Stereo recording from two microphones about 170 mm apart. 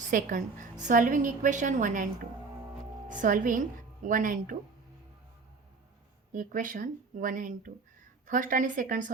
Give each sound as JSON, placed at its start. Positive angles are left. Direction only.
{"t": 0.0, "sound": "a woman's voice", "side_deg": -50}
{"t": 3.1, "sound": "a woman's voice", "side_deg": -50}
{"t": 6.3, "sound": "a woman's voice", "side_deg": -50}